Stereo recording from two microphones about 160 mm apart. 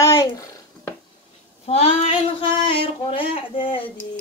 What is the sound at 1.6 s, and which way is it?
Speech, 40° left (ahead or behind).